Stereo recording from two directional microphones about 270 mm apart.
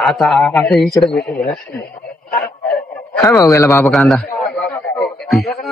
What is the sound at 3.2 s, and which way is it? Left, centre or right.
Speech, centre.